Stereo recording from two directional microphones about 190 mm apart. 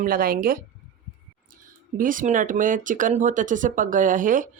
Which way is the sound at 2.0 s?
45° right (ahead or behind).